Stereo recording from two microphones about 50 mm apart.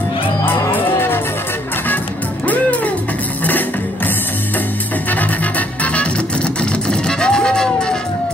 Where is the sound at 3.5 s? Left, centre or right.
Left; by 7.9 s centre.